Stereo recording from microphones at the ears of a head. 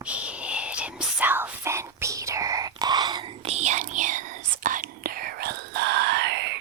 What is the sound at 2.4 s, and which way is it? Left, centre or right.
Whispering, right.